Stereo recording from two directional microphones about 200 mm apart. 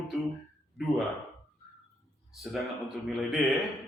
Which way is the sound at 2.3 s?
Centre (ahead or behind).